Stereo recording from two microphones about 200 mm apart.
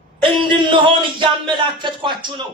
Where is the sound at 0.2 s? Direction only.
25° right (ahead or behind).